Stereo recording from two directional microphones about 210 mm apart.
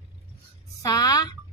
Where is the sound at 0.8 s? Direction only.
20° left (ahead or behind).